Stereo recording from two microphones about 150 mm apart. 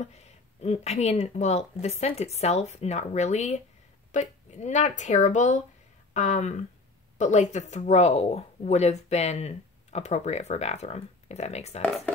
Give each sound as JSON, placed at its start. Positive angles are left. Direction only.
{"t": 0.0, "sound": "speech", "side_deg": 45}